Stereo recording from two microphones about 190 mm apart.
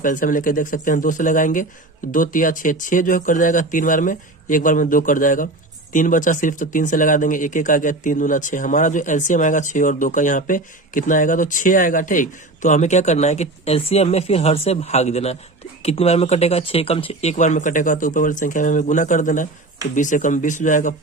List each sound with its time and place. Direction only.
0.0 s speech: 45° left (ahead or behind)